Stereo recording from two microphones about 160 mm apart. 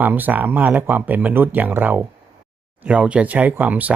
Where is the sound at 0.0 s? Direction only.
10° right (ahead or behind).